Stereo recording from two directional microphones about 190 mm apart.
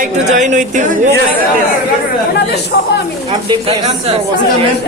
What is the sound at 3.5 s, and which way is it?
Speech, 30° right (ahead or behind).